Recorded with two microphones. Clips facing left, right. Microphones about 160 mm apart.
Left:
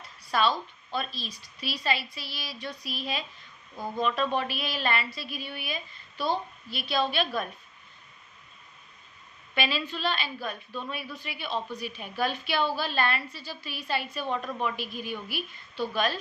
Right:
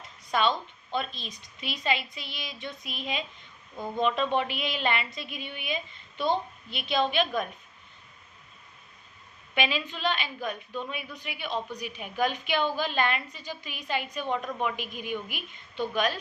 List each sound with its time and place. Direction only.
0.2 s a woman's voice: 20° right (ahead or behind)
9.6 s a woman's voice: 15° right (ahead or behind)